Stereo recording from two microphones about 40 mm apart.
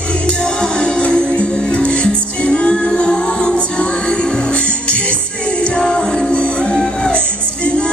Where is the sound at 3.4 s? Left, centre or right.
Left.